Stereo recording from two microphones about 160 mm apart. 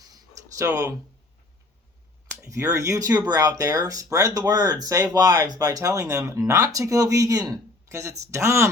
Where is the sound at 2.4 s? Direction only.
20° right (ahead or behind).